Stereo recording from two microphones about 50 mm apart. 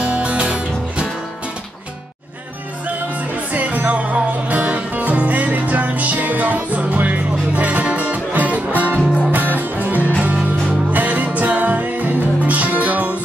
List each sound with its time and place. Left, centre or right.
0.0 s music: right
3.5 s music: right